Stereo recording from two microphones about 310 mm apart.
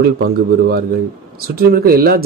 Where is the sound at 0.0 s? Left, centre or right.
Right.